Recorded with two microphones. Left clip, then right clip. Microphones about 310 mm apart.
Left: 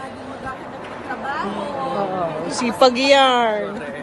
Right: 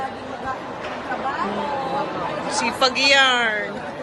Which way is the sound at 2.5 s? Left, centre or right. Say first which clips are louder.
Left 4 dB; centre.